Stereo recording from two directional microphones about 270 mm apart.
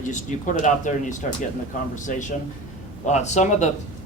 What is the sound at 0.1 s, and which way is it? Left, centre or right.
Speech, left.